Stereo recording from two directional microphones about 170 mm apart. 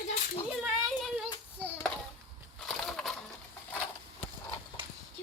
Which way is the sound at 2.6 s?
Centre (ahead or behind).